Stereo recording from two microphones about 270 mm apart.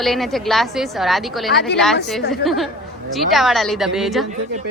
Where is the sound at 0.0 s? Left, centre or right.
Centre.